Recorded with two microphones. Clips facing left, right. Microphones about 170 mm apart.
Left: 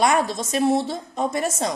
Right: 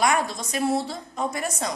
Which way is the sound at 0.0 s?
25° left (ahead or behind).